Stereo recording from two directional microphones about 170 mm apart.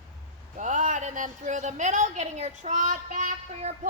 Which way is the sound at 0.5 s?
45° right (ahead or behind).